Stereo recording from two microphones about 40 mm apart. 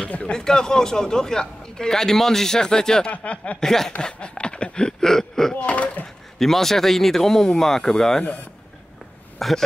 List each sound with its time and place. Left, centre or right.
0.0 s speech: left
0.3 s speech: centre
3.1 s speech: left
3.6 s speech: centre
4.0 s speech: left
5.0 s throat clearing: centre
5.6 s door: left
6.4 s speech: centre
9.4 s a man's voice: centre